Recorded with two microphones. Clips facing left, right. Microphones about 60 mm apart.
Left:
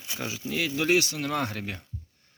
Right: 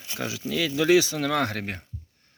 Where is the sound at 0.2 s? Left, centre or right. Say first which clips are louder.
Right 3 dB; right.